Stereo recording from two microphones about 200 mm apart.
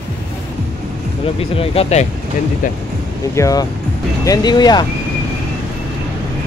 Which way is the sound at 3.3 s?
15° left (ahead or behind).